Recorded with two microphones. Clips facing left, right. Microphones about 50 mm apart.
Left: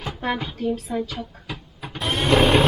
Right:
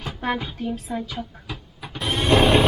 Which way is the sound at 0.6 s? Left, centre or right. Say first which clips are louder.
Left 3 dB; centre.